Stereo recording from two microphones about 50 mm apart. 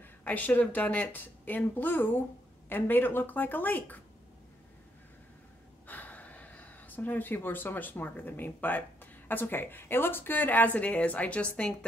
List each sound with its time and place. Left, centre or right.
0.0 s speech: left
5.9 s speech: left